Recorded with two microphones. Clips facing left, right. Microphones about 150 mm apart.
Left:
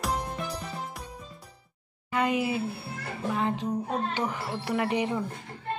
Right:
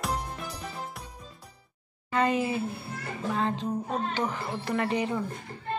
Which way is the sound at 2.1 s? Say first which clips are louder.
Right 1 dB; 15° left (ahead or behind).